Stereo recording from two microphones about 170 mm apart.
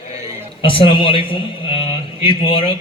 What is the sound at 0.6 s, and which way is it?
A man's voice, 30° left (ahead or behind).